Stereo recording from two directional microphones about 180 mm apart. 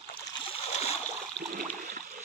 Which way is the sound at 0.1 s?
35° left (ahead or behind).